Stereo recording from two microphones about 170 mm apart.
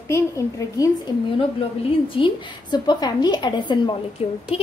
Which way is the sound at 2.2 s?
25° left (ahead or behind).